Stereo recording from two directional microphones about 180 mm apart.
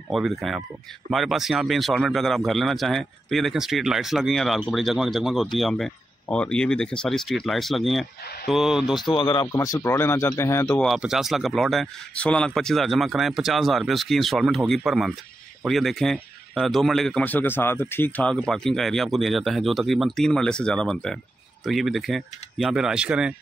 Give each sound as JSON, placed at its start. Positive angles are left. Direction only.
{"t": 0.1, "sound": "a man's voice", "side_deg": 0}
{"t": 9.1, "sound": "speech", "side_deg": 25}
{"t": 10.8, "sound": "a man's voice", "side_deg": 0}